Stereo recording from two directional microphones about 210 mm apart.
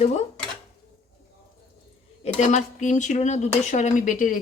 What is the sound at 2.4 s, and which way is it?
Speech, 35° left (ahead or behind).